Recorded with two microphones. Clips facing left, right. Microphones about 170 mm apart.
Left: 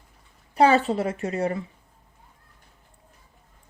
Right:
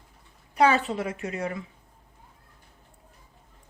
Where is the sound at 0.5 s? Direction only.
30° left (ahead or behind).